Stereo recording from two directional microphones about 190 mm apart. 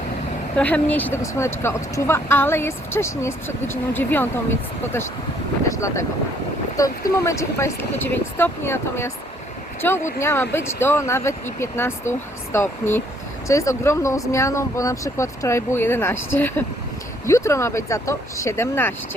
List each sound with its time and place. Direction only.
0.5 s speech: 10° left (ahead or behind)
5.6 s speech: 15° left (ahead or behind)
10.2 s speech: 15° left (ahead or behind)